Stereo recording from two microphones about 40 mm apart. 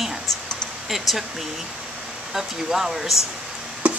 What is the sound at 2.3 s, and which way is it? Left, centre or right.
Speech, centre.